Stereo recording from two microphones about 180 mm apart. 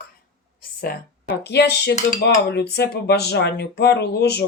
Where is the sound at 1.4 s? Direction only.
65° left (ahead or behind).